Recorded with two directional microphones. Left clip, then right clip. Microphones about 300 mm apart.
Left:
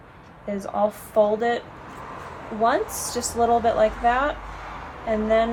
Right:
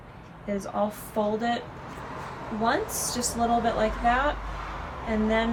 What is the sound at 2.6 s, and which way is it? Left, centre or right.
Speech, left.